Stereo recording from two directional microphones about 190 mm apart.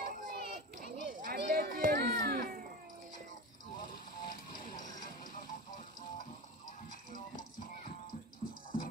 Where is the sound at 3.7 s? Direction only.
45° left (ahead or behind).